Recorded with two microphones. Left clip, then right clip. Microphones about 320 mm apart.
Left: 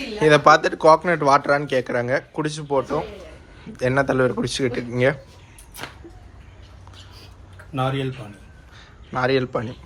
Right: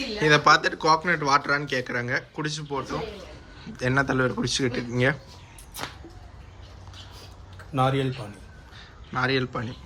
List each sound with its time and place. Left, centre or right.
0.2 s speech: centre
7.7 s speech: centre
9.1 s speech: centre